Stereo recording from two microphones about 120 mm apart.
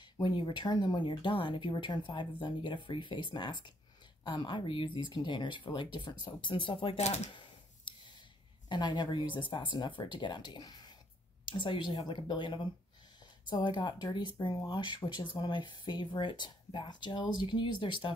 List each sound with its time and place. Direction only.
0.0 s speech: 40° left (ahead or behind)
7.3 s a sound: 40° left (ahead or behind)
8.6 s speech: 35° left (ahead or behind)